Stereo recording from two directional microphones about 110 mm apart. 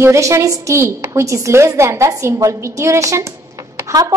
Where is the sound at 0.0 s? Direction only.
25° right (ahead or behind).